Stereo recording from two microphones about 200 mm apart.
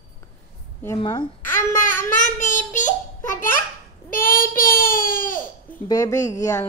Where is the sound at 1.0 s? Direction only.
25° left (ahead or behind).